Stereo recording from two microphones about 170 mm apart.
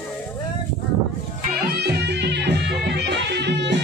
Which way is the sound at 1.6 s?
80° right.